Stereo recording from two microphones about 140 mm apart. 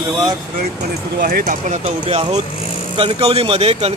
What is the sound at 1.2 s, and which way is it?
Speech, 85° right.